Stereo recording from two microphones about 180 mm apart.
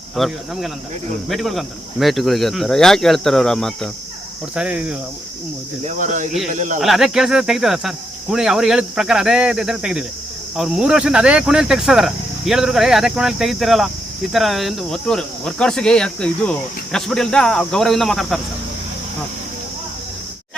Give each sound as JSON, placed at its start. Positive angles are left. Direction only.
{"t": 0.2, "sound": "speech", "side_deg": 0}
{"t": 5.8, "sound": "speech", "side_deg": -45}
{"t": 6.8, "sound": "speech", "side_deg": 0}